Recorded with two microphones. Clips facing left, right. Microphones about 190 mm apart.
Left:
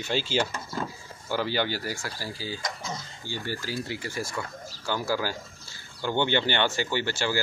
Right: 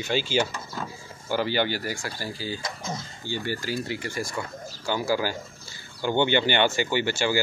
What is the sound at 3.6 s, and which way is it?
Speech, 5° left (ahead or behind).